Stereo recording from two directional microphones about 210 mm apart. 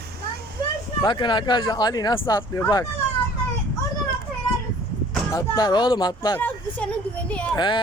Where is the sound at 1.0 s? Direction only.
20° left (ahead or behind).